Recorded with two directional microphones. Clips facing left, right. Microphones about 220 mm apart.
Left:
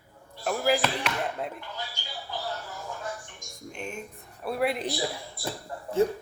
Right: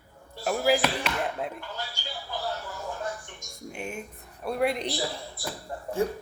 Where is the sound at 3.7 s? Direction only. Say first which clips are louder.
Right 1 dB; 10° right (ahead or behind).